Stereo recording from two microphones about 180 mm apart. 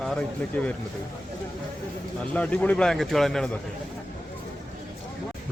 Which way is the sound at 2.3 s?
5° left (ahead or behind).